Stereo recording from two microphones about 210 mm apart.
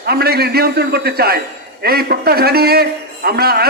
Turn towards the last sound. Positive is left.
turn(degrees=-50)  # may be behind; listen again after turning